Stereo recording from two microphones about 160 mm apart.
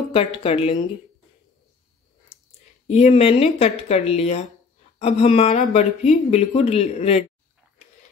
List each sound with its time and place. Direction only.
0.1 s speech: 35° left (ahead or behind)
2.9 s speech: 40° left (ahead or behind)